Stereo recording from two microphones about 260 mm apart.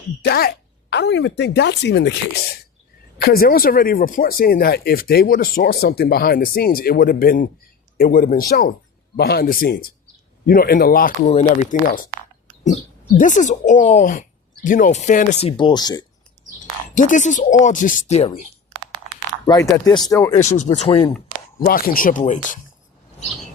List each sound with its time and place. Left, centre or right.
0.2 s speech: left
3.2 s speech: left
11.3 s speech: left
13.1 s speech: left
16.9 s speech: left
19.6 s speech: centre
20.3 s speech: left
21.6 s speech: left